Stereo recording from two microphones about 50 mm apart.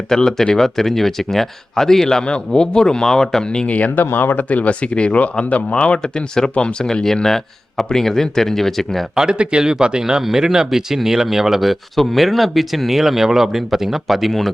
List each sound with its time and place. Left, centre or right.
0.1 s speech: centre
3.7 s speech: left
4.0 s speech: left; by 6.5 s centre
6.5 s speech: left
6.7 s speech: centre
9.1 s speech: centre